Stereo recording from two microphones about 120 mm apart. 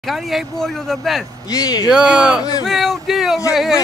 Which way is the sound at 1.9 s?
5° right (ahead or behind).